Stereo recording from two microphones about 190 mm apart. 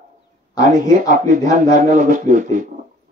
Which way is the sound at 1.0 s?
45° right (ahead or behind).